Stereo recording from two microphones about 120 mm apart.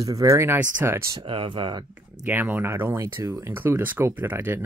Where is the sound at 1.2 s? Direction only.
45° right (ahead or behind).